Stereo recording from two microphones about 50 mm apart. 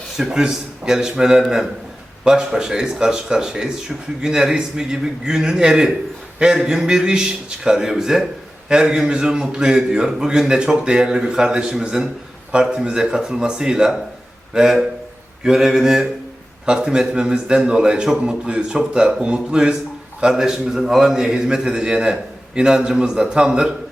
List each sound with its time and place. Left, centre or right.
0.3 s a man's voice: centre